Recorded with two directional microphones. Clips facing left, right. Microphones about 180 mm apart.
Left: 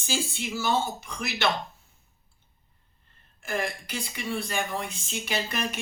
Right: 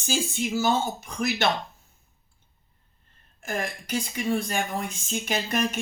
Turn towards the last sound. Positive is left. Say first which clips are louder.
# right 4 dB
turn(degrees=-45)  # may be behind; listen again after turning